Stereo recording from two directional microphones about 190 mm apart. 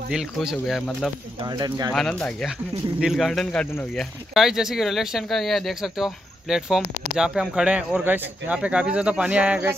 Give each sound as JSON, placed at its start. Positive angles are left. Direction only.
{"t": 0.1, "sound": "speech", "side_deg": 0}
{"t": 1.4, "sound": "speech", "side_deg": -20}
{"t": 1.9, "sound": "speech", "side_deg": 5}